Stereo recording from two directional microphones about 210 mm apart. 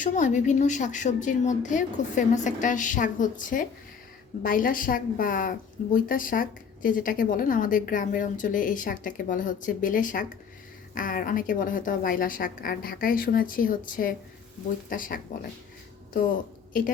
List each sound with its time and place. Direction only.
0.0 s a woman's voice: 35° left (ahead or behind)